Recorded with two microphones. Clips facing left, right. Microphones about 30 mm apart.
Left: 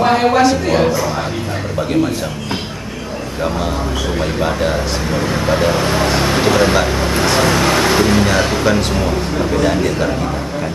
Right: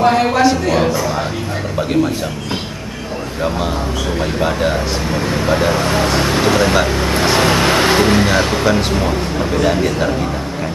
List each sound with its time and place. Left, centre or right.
0.0 s a man's voice: centre
4.2 s speech: centre
7.3 s vehicle: right
7.9 s speech: right
8.3 s speech: centre